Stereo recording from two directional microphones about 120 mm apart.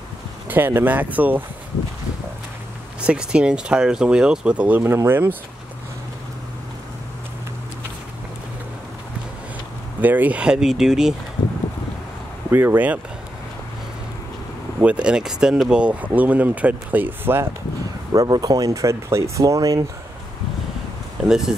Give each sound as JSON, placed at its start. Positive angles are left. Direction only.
{"t": 0.5, "sound": "speech", "side_deg": -20}
{"t": 3.1, "sound": "speech", "side_deg": -10}
{"t": 10.0, "sound": "speech", "side_deg": -15}
{"t": 12.4, "sound": "speech", "side_deg": -15}
{"t": 14.8, "sound": "speech", "side_deg": -10}
{"t": 18.1, "sound": "speech", "side_deg": -35}
{"t": 21.3, "sound": "speech", "side_deg": -5}